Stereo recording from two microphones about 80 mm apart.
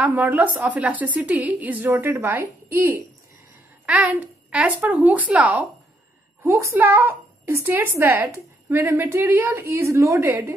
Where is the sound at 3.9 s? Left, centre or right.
Centre.